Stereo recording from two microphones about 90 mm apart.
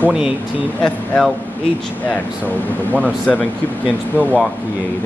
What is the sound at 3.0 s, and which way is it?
Speech, 15° left (ahead or behind).